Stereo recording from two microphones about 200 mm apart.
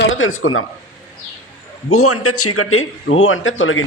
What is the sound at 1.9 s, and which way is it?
A man's voice, 90° left.